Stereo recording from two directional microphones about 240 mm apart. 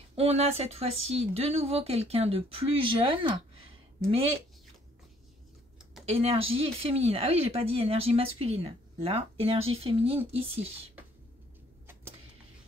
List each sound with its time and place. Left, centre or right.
0.1 s speech: right
6.0 s speech: right